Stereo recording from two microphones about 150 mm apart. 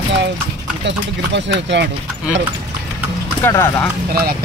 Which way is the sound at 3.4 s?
15° left (ahead or behind).